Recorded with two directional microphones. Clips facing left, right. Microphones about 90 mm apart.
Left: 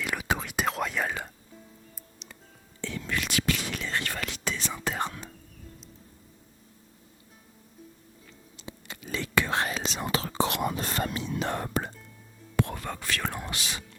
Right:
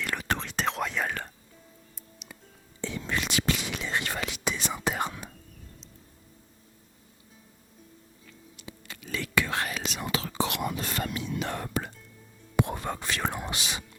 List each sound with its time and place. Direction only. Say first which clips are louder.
0.0 s whispering: left 1 dB; 5° left (ahead or behind)
2.1 s music: right 4 dB; 5° right (ahead or behind)
2.8 s whispering: right 1 dB; 20° right (ahead or behind)
8.5 s whispering: left 3 dB; 30° left (ahead or behind)
12.5 s whispering: right 2 dB; 20° right (ahead or behind)